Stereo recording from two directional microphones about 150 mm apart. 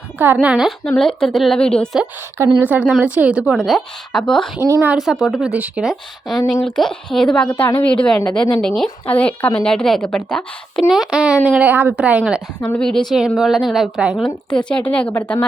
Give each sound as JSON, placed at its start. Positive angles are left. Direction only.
{"t": 0.4, "sound": "a woman's voice", "side_deg": -10}
{"t": 0.9, "sound": "a woman's voice", "side_deg": 5}
{"t": 2.6, "sound": "a woman's voice", "side_deg": -10}
{"t": 4.6, "sound": "a woman's voice", "side_deg": -15}
{"t": 5.2, "sound": "a woman's voice", "side_deg": -5}
{"t": 12.6, "sound": "a woman's voice", "side_deg": 5}
{"t": 14.5, "sound": "a woman's voice", "side_deg": 5}